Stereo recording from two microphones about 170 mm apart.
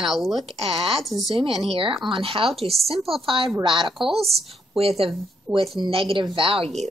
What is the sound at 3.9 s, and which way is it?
Speech, centre (ahead or behind).